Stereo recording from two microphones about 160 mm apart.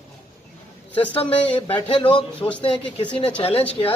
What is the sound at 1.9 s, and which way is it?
A man's voice, 35° left (ahead or behind).